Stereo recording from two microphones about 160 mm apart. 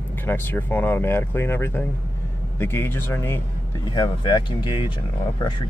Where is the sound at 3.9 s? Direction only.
30° left (ahead or behind).